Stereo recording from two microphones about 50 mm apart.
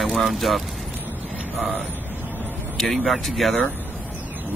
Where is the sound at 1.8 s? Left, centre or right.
Left.